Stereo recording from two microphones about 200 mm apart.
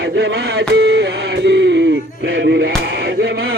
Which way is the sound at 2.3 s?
65° right (ahead or behind).